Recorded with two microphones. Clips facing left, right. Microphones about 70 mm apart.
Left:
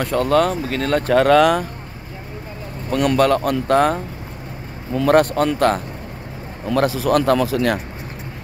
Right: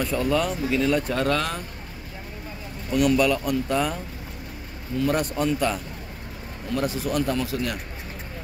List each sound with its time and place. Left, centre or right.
0.0 s speech: left
1.0 s speech: left
3.2 s speech: left
5.0 s speech: left
6.8 s speech: left